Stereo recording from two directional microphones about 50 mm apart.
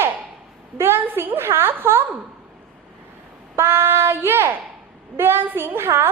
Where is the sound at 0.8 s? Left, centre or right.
Right.